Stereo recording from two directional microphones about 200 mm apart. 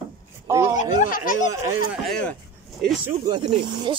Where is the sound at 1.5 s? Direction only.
15° right (ahead or behind).